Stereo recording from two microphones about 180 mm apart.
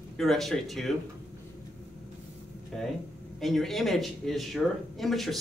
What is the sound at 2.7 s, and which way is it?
Speech, centre (ahead or behind).